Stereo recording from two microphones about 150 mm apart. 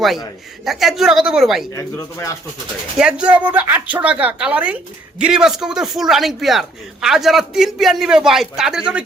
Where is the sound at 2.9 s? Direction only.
5° right (ahead or behind).